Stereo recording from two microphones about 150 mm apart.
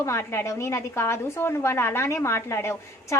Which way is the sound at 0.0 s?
20° left (ahead or behind).